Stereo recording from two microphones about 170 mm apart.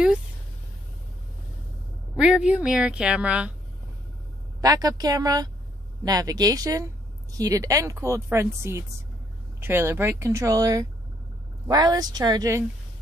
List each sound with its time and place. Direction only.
2.1 s a woman's voice: 5° right (ahead or behind)
4.6 s speech: 20° right (ahead or behind)